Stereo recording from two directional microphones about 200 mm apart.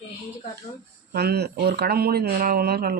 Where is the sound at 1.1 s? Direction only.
55° right (ahead or behind).